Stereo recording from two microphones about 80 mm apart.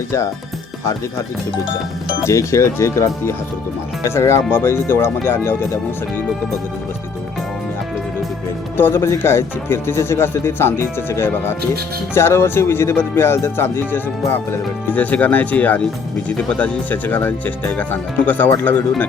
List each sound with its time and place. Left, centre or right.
2.2 s speech: left
8.8 s speech: left